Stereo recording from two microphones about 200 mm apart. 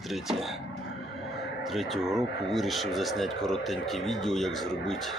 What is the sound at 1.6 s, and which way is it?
Speech, centre (ahead or behind).